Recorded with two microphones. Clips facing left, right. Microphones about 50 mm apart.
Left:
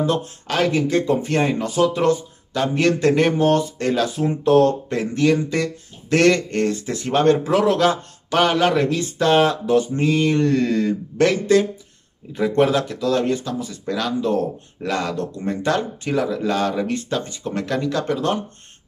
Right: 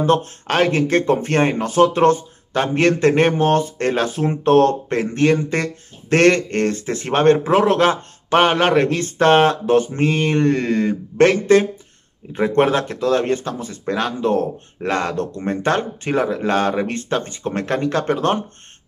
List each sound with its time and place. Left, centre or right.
0.0 s speech: right